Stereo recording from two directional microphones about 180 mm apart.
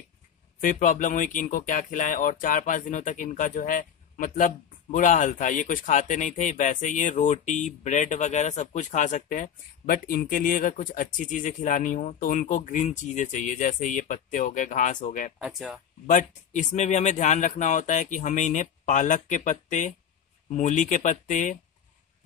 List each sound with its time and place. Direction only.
0.6 s speech: 50° left (ahead or behind)
15.3 s speech: 5° right (ahead or behind)
16.1 s speech: 45° left (ahead or behind)